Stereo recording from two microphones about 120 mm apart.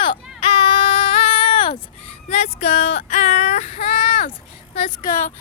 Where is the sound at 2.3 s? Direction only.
70° left (ahead or behind).